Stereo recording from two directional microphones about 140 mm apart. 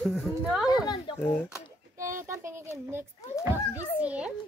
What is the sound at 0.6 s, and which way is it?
Speech, 30° left (ahead or behind).